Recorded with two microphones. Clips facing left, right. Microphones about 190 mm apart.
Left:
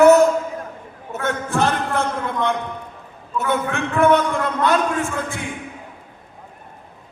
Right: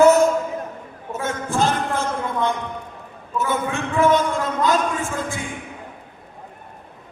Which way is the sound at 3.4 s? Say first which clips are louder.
Left 2 dB; 60° left (ahead or behind).